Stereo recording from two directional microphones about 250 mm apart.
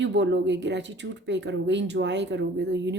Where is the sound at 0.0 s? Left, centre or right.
Right.